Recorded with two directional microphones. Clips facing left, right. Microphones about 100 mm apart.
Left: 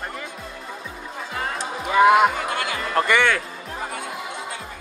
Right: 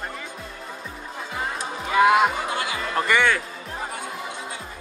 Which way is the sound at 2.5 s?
25° right (ahead or behind).